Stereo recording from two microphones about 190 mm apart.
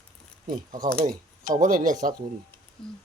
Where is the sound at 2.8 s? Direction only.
25° left (ahead or behind).